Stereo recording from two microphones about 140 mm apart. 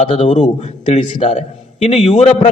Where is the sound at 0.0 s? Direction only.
40° left (ahead or behind).